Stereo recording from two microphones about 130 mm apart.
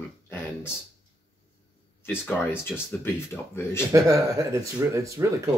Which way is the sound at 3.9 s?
25° right (ahead or behind).